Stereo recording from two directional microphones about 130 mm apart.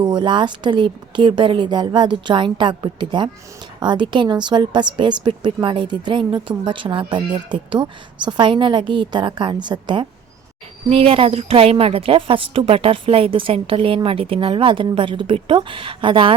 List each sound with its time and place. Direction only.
0.0 s speech: 35° right (ahead or behind)
10.8 s a woman's voice: 50° right (ahead or behind)